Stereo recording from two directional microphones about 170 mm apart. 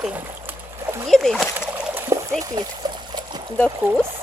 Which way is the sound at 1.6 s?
10° right (ahead or behind).